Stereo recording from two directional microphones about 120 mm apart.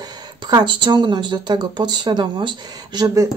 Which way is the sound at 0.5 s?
40° right (ahead or behind).